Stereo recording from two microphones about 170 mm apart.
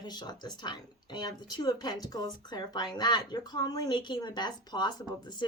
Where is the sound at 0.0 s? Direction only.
25° left (ahead or behind).